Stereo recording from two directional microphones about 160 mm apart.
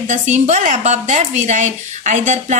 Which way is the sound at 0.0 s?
50° right (ahead or behind).